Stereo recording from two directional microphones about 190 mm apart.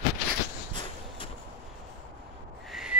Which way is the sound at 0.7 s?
25° left (ahead or behind).